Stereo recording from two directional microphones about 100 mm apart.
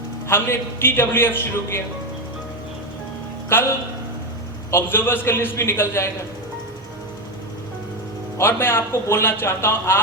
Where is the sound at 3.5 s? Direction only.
20° left (ahead or behind).